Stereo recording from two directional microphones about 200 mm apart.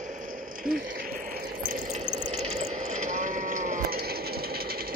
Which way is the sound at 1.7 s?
35° right (ahead or behind).